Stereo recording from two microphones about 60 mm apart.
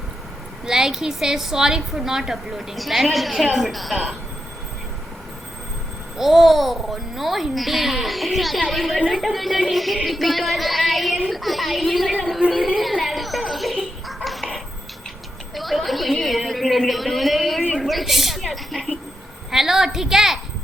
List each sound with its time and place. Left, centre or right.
0.6 s a woman's voice: centre
6.1 s a woman's voice: centre
12.5 s a sound: centre
18.4 s a woman's voice: centre